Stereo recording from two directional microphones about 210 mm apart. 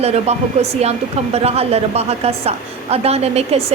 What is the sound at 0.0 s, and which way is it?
Speech, 30° right (ahead or behind).